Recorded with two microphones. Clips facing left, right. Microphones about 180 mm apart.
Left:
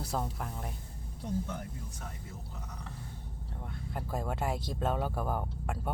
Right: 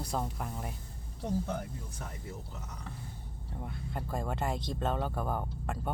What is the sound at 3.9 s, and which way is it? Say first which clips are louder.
Speech: even; 5° left (ahead or behind).